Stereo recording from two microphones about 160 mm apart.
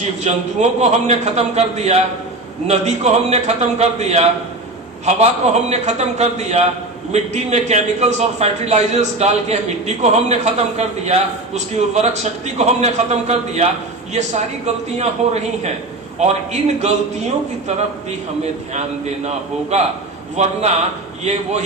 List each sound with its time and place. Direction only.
0.0 s a man's voice: 45° right (ahead or behind)
14.9 s a man's voice: 45° right (ahead or behind)
20.3 s a man's voice: 45° right (ahead or behind)